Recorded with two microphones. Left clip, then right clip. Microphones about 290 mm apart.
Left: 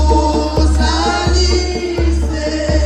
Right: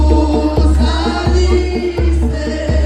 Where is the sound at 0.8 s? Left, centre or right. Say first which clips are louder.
Left 2 dB; centre.